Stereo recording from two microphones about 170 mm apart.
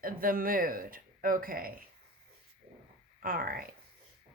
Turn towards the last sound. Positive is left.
turn(degrees=-60)  # may be behind; listen again after turning